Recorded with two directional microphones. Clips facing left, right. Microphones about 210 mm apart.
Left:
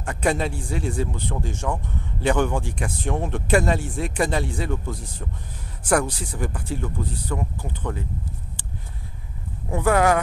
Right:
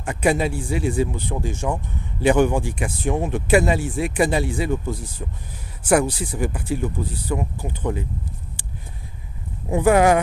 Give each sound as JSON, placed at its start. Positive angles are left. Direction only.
{"t": 0.0, "sound": "speech", "side_deg": -10}
{"t": 9.7, "sound": "speech", "side_deg": -15}